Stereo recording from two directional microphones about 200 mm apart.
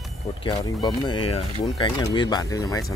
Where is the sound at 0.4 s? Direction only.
20° left (ahead or behind).